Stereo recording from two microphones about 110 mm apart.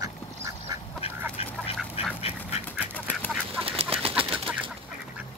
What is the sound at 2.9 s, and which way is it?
Duck, 15° left (ahead or behind).